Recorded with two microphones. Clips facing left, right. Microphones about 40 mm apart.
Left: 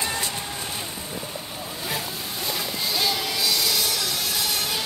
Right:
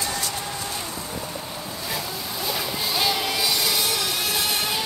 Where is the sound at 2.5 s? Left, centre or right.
Centre.